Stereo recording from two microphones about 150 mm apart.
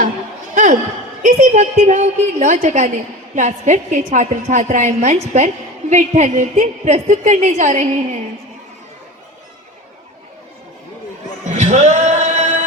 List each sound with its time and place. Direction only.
0.5 s a sound: 60° right (ahead or behind)
1.2 s a woman's voice: 50° right (ahead or behind)
11.4 s music: 50° right (ahead or behind)